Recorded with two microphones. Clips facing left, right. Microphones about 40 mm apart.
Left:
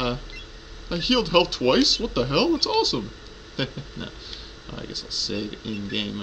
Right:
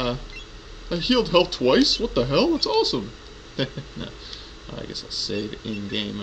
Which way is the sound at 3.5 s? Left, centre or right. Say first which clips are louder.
Right 2 dB; centre.